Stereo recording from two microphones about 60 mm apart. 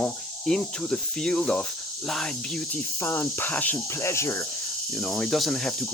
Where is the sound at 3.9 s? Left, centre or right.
Left.